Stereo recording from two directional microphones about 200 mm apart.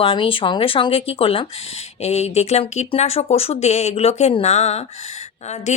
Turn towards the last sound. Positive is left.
turn(degrees=35)  # may be behind; listen again after turning